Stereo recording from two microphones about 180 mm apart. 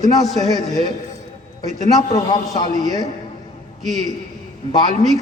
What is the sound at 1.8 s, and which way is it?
A man's voice, 20° left (ahead or behind).